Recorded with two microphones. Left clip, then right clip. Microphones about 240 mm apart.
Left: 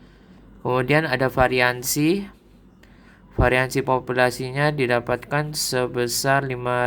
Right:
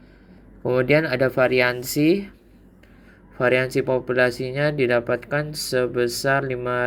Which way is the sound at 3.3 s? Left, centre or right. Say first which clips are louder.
Even; centre.